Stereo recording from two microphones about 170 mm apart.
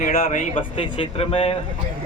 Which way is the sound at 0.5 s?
35° left (ahead or behind).